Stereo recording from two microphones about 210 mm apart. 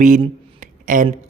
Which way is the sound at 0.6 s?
40° right (ahead or behind).